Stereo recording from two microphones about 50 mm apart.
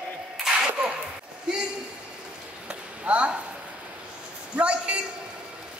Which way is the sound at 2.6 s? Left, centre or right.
Right.